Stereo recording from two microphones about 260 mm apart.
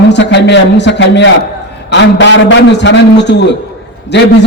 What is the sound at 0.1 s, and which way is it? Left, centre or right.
A man's voice, left.